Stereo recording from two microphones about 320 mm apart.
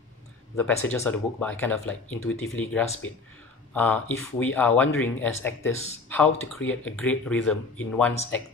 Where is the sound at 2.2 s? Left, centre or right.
Left.